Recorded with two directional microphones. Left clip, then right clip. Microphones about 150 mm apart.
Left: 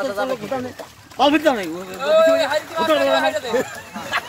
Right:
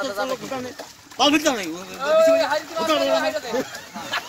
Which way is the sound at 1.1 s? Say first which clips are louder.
Left 3 dB; 45° left (ahead or behind).